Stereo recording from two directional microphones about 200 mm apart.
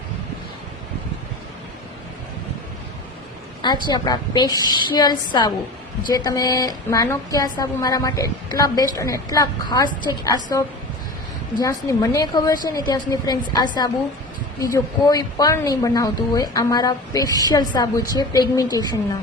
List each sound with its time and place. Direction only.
3.6 s a woman's voice: 20° left (ahead or behind)
14.6 s a woman's voice: 20° left (ahead or behind)